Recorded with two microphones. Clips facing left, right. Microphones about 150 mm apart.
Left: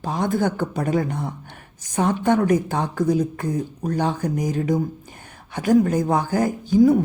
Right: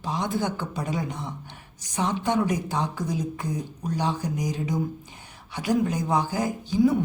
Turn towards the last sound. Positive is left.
turn(degrees=45)  # may be behind; listen again after turning